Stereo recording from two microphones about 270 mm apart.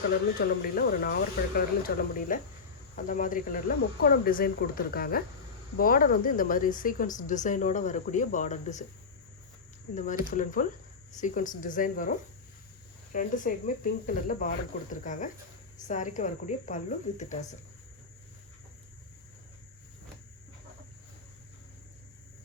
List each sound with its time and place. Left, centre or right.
0.3 s speech: left
9.9 s speech: left
13.1 s speech: left